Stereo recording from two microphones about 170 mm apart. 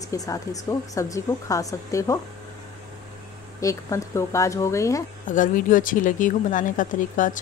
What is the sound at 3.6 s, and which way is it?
A woman's voice, 20° left (ahead or behind).